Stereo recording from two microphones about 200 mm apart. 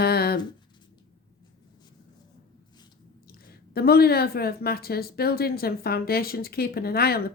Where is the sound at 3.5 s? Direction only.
50° left (ahead or behind).